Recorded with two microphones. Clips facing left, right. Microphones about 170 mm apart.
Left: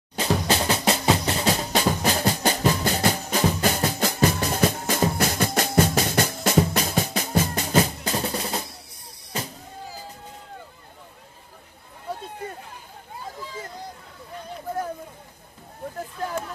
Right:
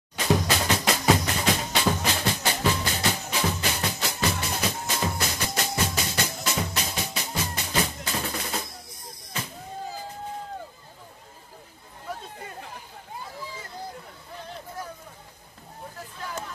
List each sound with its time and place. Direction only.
0.2 s music: 30° left (ahead or behind)